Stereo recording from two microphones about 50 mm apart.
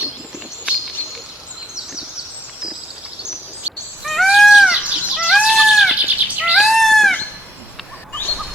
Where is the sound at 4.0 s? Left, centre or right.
Centre.